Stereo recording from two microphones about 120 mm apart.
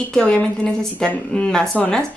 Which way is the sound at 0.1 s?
10° left (ahead or behind).